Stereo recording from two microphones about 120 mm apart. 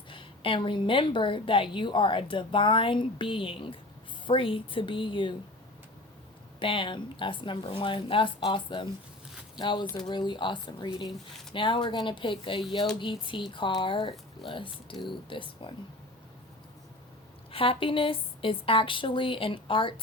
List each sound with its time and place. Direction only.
0.1 s a woman's voice: 45° left (ahead or behind)
6.6 s a woman's voice: 45° left (ahead or behind)
17.5 s a woman's voice: 50° left (ahead or behind)